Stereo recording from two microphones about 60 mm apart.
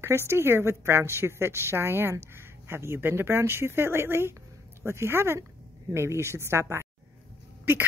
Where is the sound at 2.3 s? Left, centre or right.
Right.